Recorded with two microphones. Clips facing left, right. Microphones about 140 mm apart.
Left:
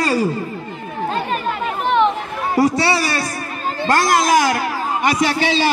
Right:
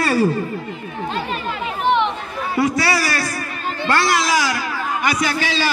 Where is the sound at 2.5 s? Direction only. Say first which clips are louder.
Left 3 dB; 35° left (ahead or behind).